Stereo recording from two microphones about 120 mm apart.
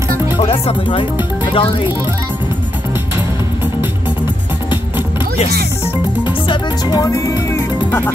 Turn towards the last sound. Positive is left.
turn(degrees=25)  # may be behind; listen again after turning